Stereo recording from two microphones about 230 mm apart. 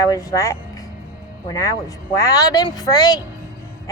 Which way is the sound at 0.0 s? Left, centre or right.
Centre.